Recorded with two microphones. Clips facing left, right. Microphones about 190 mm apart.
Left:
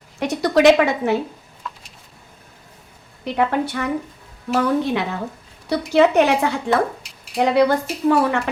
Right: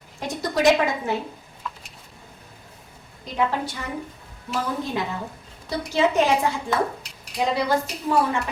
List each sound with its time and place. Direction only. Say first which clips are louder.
0.2 s speech: left 7 dB; 70° left (ahead or behind)
3.2 s a woman's voice: left 5 dB; 65° left (ahead or behind)